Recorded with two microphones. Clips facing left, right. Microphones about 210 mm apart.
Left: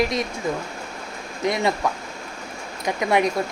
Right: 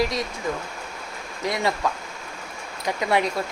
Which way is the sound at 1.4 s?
20° left (ahead or behind).